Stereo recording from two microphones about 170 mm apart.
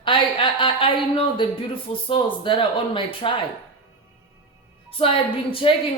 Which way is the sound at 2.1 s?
30° left (ahead or behind).